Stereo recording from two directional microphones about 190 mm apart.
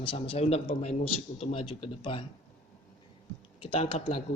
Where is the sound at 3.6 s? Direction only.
30° left (ahead or behind).